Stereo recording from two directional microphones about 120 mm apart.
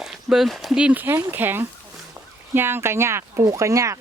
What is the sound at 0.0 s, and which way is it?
Speech, 5° right (ahead or behind).